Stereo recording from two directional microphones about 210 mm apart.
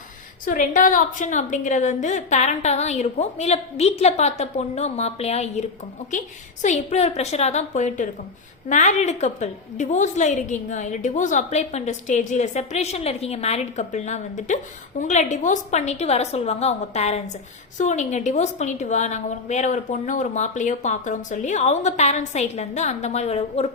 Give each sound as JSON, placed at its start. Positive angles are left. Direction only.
{"t": 0.4, "sound": "a woman's voice", "side_deg": 40}